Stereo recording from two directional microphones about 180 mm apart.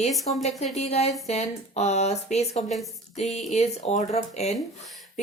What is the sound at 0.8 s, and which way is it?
Speech, 35° left (ahead or behind).